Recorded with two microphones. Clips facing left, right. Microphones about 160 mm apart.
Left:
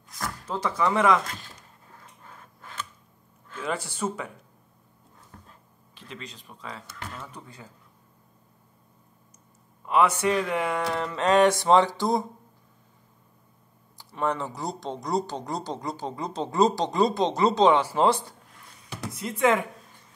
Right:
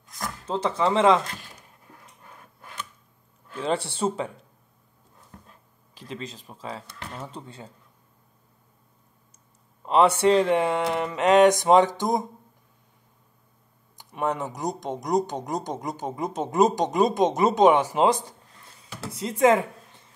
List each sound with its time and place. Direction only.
0.2 s speech: 25° right (ahead or behind)
3.5 s music: 30° right (ahead or behind)
5.9 s speech: 35° right (ahead or behind)
9.8 s music: 30° right (ahead or behind)
13.9 s speech: 20° right (ahead or behind)
19.1 s music: 30° right (ahead or behind)